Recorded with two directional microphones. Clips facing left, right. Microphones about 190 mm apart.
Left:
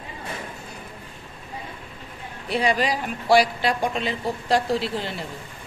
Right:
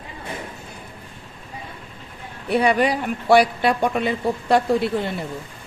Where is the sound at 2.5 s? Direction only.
60° right (ahead or behind).